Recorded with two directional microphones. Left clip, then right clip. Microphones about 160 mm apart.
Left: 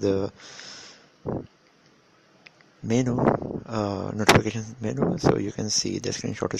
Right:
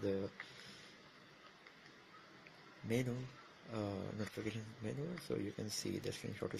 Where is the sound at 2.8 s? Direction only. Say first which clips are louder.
Left 19 dB; 45° left (ahead or behind).